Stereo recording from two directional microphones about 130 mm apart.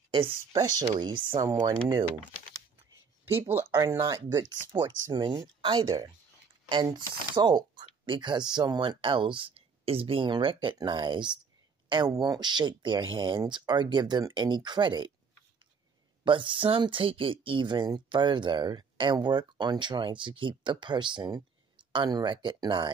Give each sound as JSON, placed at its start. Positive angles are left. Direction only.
{"t": 0.1, "sound": "speech", "side_deg": -35}
{"t": 3.3, "sound": "speech", "side_deg": -20}
{"t": 3.7, "sound": "speech", "side_deg": -30}
{"t": 16.3, "sound": "speech", "side_deg": -40}